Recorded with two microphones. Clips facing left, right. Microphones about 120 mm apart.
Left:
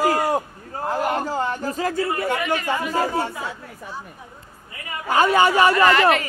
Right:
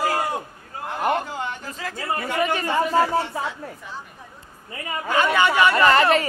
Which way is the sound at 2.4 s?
35° right (ahead or behind).